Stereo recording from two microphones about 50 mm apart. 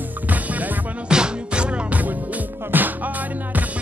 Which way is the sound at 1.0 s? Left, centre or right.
Centre.